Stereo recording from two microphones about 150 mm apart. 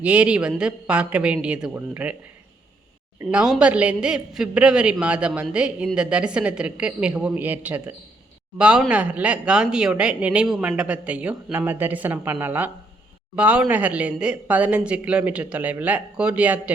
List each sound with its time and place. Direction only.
0.0 s a man's voice: 10° right (ahead or behind)
3.2 s a man's voice: centre (ahead or behind)